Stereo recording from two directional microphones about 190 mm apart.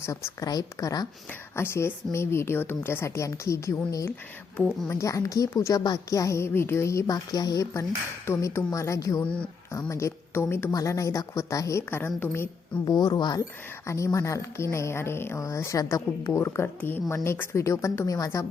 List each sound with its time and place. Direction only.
0.0 s a woman's voice: 15° left (ahead or behind)